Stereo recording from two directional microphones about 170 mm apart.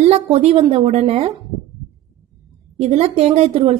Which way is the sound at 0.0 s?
40° right (ahead or behind).